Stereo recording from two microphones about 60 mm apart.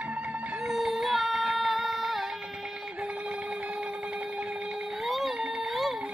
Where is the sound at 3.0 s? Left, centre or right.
Centre.